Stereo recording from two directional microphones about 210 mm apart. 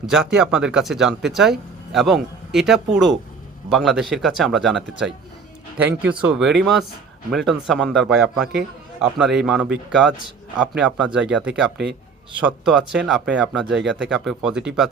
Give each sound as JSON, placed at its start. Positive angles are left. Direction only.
{"t": 0.0, "sound": "speech", "side_deg": -5}